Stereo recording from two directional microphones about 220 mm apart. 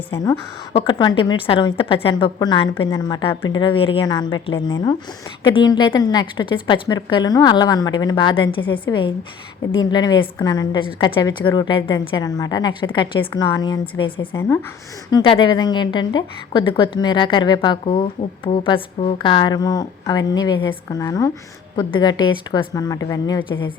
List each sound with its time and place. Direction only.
0.7 s a woman's voice: 25° left (ahead or behind)
15.1 s a woman's voice: 25° left (ahead or behind)